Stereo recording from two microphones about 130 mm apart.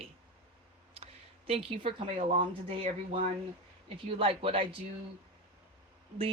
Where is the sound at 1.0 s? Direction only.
45° right (ahead or behind).